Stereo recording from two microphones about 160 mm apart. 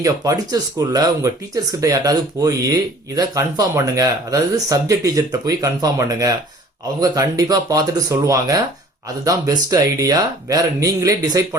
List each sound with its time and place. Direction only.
0.0 s speech: 20° right (ahead or behind)